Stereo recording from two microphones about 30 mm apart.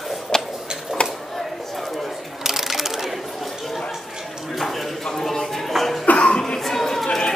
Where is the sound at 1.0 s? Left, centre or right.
Left.